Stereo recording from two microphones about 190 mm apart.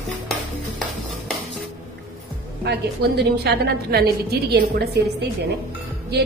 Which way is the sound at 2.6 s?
60° right (ahead or behind).